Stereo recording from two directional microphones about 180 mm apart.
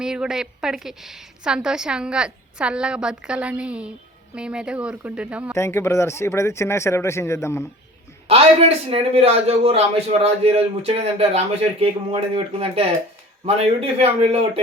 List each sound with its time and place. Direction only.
0.0 s a woman's voice: 5° right (ahead or behind)
5.5 s speech: 15° left (ahead or behind)
8.3 s a man's voice: 35° right (ahead or behind)